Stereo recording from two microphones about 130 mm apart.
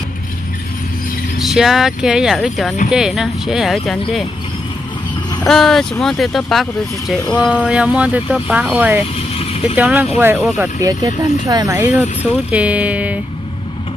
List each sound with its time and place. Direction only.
1.4 s speech: centre (ahead or behind)
5.5 s speech: 5° left (ahead or behind)
10.8 s speech: 30° right (ahead or behind)
11.7 s speech: 15° right (ahead or behind)